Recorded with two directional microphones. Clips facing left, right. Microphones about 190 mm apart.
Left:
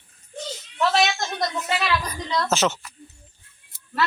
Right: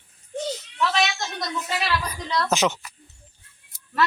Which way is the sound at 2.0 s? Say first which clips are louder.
Even; 10° right (ahead or behind).